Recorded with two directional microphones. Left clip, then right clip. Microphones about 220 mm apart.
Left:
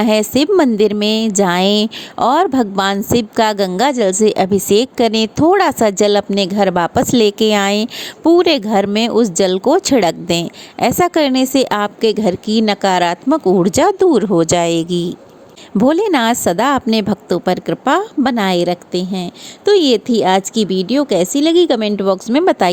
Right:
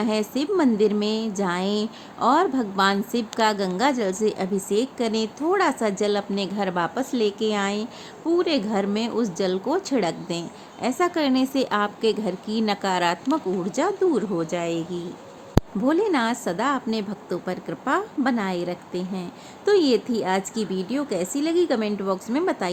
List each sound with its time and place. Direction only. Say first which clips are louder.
0.0 s a woman's voice: left 11 dB; 35° left (ahead or behind)